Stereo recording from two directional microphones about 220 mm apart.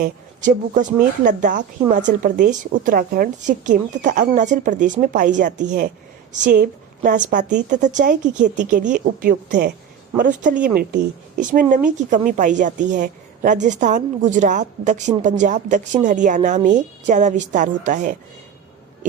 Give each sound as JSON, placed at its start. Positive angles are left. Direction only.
{"t": 0.0, "sound": "a woman's voice", "side_deg": -35}